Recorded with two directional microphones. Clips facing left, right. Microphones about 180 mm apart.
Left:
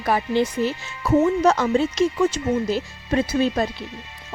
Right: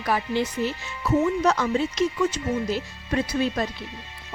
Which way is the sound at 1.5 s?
45° left (ahead or behind).